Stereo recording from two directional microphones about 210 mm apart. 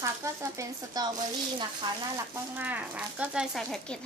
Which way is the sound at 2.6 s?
10° right (ahead or behind).